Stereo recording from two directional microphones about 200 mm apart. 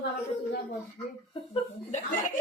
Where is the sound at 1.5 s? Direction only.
35° left (ahead or behind).